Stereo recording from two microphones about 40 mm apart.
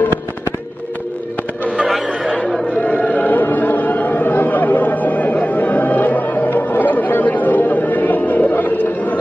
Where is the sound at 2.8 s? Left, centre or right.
Left.